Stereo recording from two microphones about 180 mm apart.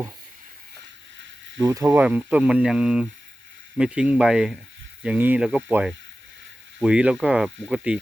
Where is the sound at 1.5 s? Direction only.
20° right (ahead or behind).